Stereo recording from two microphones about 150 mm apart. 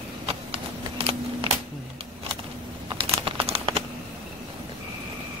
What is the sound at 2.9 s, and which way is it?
Crumpling, 35° right (ahead or behind).